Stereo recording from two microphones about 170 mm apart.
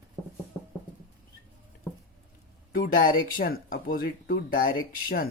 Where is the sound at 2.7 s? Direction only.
55° left (ahead or behind).